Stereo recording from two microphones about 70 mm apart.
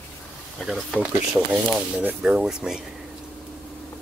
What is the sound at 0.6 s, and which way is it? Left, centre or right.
Speech, centre.